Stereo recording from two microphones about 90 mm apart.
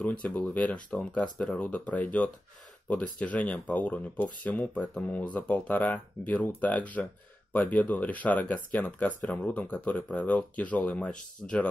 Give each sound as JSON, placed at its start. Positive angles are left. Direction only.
{"t": 0.0, "sound": "speech", "side_deg": 15}